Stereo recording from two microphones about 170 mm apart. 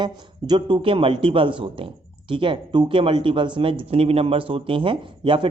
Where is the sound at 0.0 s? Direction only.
25° right (ahead or behind).